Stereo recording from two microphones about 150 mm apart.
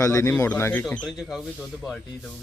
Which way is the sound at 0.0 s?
20° left (ahead or behind).